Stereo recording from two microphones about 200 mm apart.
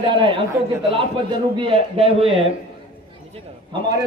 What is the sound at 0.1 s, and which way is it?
A man's voice, 25° right (ahead or behind).